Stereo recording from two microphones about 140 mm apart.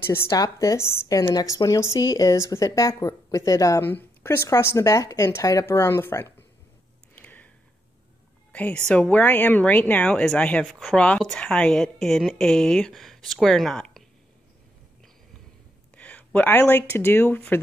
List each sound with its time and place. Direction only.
0.0 s a woman's voice: 20° left (ahead or behind)
7.2 s a sound: 10° left (ahead or behind)
8.5 s speech: 10° left (ahead or behind)
16.0 s speech: 10° left (ahead or behind)